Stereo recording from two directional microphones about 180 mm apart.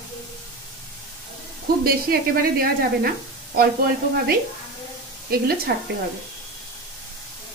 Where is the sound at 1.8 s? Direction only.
55° right (ahead or behind).